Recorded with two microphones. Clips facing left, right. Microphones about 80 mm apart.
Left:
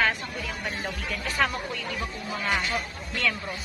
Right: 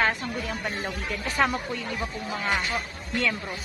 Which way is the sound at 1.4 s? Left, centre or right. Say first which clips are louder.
Right 2 dB; right.